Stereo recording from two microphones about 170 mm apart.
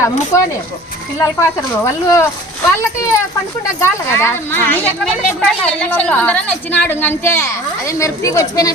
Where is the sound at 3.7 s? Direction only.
15° left (ahead or behind).